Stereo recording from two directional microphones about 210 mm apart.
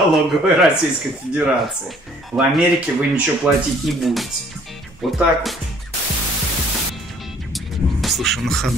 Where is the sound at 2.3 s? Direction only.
5° right (ahead or behind).